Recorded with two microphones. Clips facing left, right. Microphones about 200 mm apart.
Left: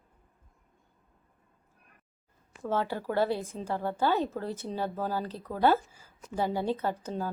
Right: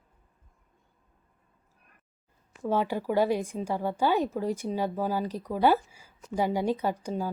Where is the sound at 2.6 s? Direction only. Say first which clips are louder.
Right 3 dB; 15° right (ahead or behind).